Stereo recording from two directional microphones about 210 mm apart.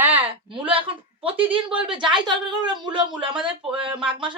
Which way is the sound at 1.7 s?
5° right (ahead or behind).